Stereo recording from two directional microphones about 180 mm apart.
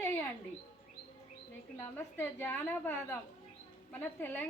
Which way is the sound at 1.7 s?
10° left (ahead or behind).